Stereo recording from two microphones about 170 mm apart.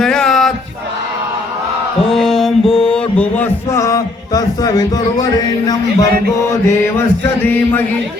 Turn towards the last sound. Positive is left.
turn(degrees=10)  # may be behind; listen again after turning